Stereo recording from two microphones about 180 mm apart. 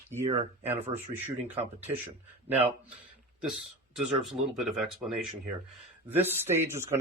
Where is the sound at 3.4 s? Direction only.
5° right (ahead or behind).